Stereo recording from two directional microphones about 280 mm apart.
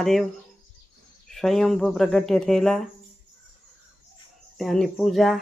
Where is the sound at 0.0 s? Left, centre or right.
Centre.